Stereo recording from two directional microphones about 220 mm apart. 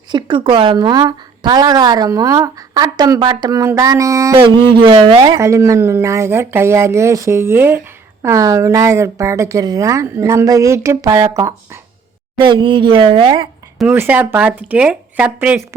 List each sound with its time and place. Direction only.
0.1 s a woman's voice: 20° right (ahead or behind)
13.7 s a woman's voice: 10° right (ahead or behind)